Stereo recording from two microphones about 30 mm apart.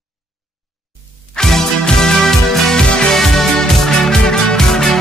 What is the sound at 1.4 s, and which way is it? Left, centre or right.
Music, centre.